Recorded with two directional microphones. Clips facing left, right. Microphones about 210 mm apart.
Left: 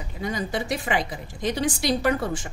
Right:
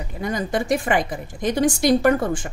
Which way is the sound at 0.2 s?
50° right (ahead or behind).